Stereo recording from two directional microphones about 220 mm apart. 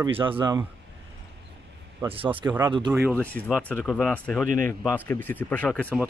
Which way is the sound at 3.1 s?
5° left (ahead or behind).